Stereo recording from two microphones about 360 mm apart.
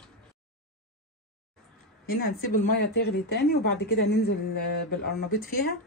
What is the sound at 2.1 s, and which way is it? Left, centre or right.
Speech, left.